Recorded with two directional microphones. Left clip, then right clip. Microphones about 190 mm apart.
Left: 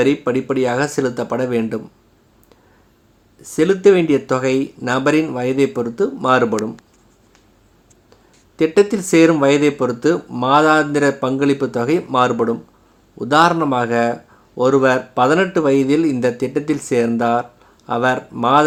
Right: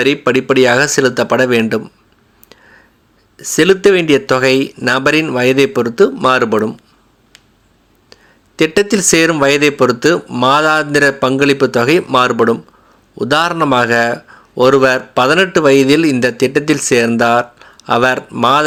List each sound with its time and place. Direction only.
0.0 s a man's voice: 20° right (ahead or behind)
3.3 s a man's voice: 20° right (ahead or behind)
8.1 s a man's voice: 20° right (ahead or behind)